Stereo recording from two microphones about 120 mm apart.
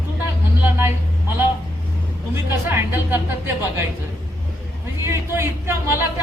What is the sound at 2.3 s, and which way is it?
Speech, 20° right (ahead or behind).